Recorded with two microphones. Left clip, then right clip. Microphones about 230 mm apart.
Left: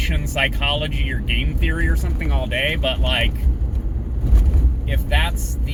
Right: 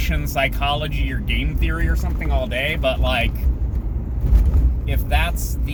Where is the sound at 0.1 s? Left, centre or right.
Centre.